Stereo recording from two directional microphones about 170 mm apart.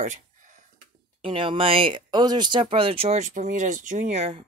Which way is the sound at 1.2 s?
30° right (ahead or behind).